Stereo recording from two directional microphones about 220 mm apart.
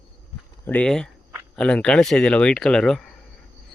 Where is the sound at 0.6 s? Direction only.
5° left (ahead or behind).